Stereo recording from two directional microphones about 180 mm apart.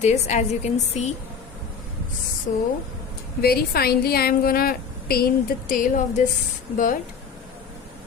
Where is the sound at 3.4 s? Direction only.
60° left (ahead or behind).